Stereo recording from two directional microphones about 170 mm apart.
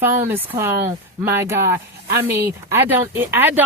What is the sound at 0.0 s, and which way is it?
Speech, 15° right (ahead or behind).